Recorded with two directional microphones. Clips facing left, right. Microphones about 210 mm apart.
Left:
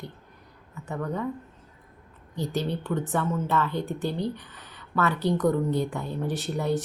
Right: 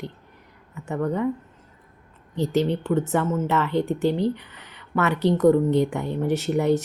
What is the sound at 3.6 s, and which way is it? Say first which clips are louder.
Speech: right 6 dB; 70° right (ahead or behind).